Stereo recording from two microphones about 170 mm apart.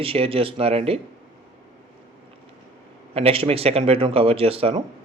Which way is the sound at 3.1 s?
35° right (ahead or behind).